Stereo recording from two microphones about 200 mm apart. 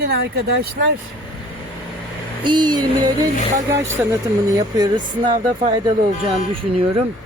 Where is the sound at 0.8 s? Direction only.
50° right (ahead or behind).